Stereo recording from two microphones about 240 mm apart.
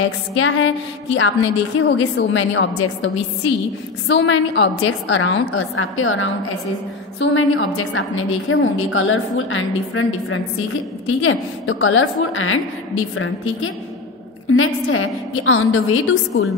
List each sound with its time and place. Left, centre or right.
0.3 s a woman's voice: left